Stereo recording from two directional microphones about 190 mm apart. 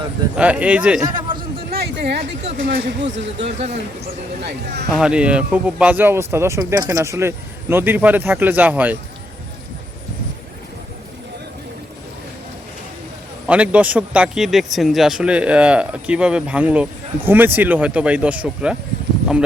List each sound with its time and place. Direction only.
0.3 s speech: 5° right (ahead or behind)
1.0 s a sound: 25° right (ahead or behind)
1.7 s a sound: 55° right (ahead or behind)
2.6 s speech: 65° right (ahead or behind)
4.4 s speech: 60° right (ahead or behind)
4.9 s speech: 5° right (ahead or behind)
13.5 s speech: 5° right (ahead or behind)